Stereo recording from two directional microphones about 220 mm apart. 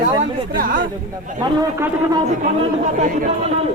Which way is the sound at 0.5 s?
40° right (ahead or behind).